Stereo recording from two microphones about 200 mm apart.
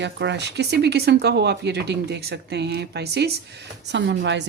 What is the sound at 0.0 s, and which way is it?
Speech, 60° right (ahead or behind).